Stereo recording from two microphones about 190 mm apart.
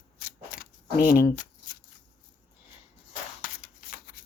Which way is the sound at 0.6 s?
50° left (ahead or behind).